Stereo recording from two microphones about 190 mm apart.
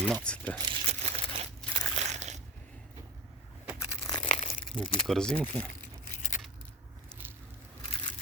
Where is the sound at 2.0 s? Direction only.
35° right (ahead or behind).